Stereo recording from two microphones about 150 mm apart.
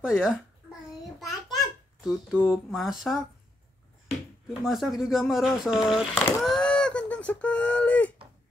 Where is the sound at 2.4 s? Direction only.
5° right (ahead or behind).